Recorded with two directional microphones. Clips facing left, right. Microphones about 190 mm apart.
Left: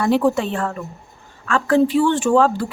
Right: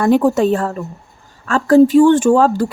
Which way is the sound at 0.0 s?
45° right (ahead or behind).